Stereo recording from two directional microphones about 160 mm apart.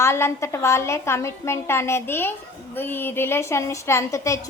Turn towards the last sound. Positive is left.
turn(degrees=20)  # may be behind; listen again after turning